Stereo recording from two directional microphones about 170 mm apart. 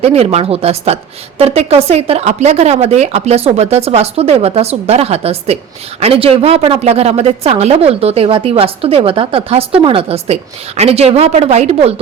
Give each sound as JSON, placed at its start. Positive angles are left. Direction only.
{"t": 0.0, "sound": "a woman's voice", "side_deg": -35}